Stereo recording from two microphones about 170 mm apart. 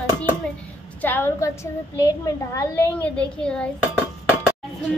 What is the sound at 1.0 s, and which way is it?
A woman's voice, 10° left (ahead or behind).